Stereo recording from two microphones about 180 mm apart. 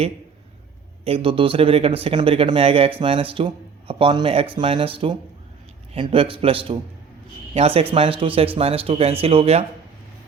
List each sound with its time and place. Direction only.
1.0 s speech: 30° right (ahead or behind)